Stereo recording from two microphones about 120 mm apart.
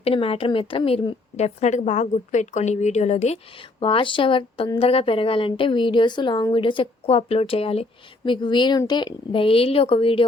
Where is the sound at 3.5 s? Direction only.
50° left (ahead or behind).